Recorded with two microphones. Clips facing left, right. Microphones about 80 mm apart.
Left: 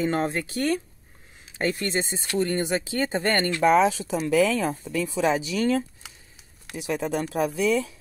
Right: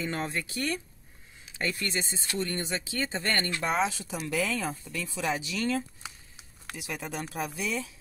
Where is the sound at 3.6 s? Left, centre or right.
Left.